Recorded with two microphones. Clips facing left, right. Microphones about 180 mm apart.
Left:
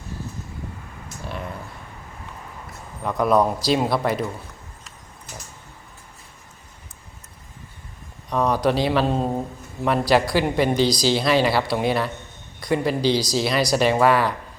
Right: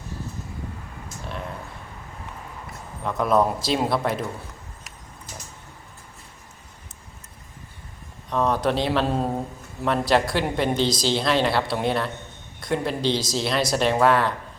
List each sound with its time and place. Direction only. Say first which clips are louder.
3.0 s speech: left 2 dB; centre (ahead or behind)
8.3 s speech: left 2 dB; centre (ahead or behind)